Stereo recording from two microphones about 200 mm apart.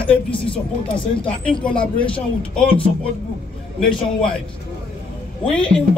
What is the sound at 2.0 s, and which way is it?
Speech, 5° left (ahead or behind).